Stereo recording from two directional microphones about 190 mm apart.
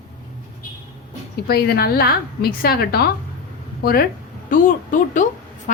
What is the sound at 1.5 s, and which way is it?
A woman's voice, 55° left (ahead or behind).